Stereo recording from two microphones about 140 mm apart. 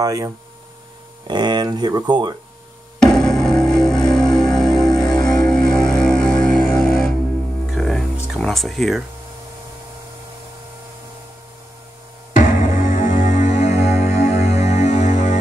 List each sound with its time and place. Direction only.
0.0 s speech: 25° right (ahead or behind)
3.0 s music: 5° left (ahead or behind)
4.9 s music: 30° left (ahead or behind)
5.4 s music: 5° left (ahead or behind)
12.4 s music: 75° left (ahead or behind); by 15.3 s 60° left (ahead or behind)